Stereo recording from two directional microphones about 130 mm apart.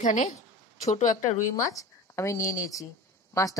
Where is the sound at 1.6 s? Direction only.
25° left (ahead or behind).